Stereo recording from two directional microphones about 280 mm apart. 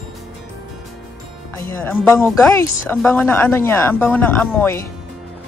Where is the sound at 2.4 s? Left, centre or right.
Centre.